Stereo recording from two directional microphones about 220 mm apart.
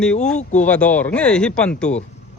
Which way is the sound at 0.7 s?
5° left (ahead or behind).